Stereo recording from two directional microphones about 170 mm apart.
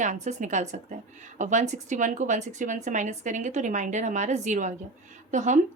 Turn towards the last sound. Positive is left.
turn(degrees=-45)  # may be behind; listen again after turning